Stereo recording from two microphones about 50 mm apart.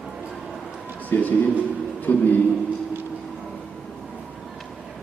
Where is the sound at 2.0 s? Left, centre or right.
Left.